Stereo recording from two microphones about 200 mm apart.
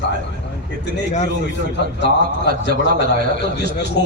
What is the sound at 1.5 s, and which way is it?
A man's voice, 60° left (ahead or behind).